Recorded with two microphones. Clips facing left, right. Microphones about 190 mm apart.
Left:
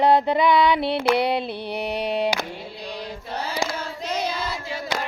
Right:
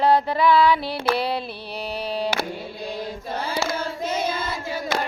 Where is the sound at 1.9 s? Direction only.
20° left (ahead or behind).